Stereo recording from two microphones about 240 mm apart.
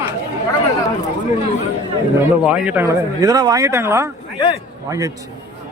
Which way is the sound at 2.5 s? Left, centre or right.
Centre.